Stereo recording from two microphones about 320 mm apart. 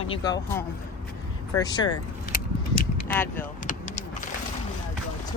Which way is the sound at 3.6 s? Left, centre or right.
Left.